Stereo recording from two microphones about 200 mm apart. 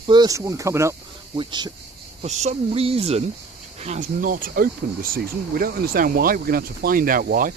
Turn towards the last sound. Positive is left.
turn(degrees=-45)  # may be behind; listen again after turning